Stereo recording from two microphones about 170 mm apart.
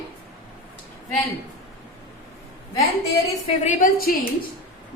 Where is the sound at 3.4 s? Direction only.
45° left (ahead or behind).